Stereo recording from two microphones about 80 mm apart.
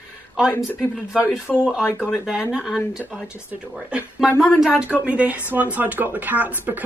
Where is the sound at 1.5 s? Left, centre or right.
Centre.